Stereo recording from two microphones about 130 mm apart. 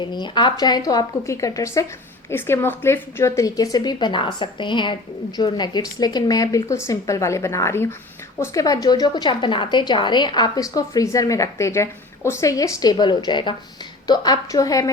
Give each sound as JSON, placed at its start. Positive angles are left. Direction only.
{"t": 0.0, "sound": "a woman's voice", "side_deg": 35}